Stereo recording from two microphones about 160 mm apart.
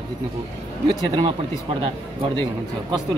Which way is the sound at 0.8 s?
35° right (ahead or behind).